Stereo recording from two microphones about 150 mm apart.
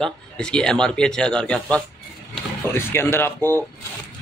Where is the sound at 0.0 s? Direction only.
5° left (ahead or behind).